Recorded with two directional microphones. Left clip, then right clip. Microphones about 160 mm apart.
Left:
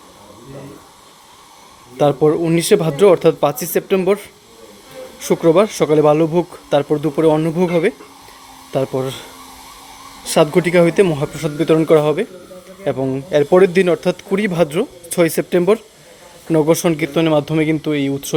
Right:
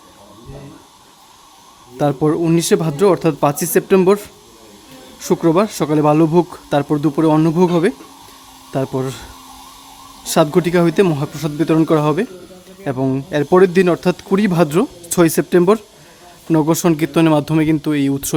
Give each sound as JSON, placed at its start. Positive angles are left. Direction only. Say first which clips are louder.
{"t": 2.0, "sound": "speech", "louder": "left 3 dB", "side_deg": -25}
{"t": 5.3, "sound": "speech", "louder": "left 2 dB", "side_deg": -30}
{"t": 10.2, "sound": "speech", "louder": "left 1 dB", "side_deg": -30}